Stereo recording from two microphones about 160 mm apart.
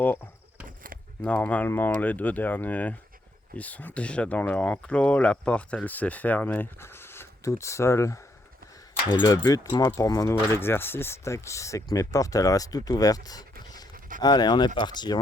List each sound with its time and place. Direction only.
1.2 s speech: 10° left (ahead or behind); by 15.2 s 25° left (ahead or behind)